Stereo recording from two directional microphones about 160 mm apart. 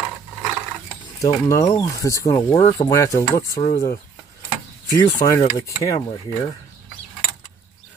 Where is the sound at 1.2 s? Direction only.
20° left (ahead or behind).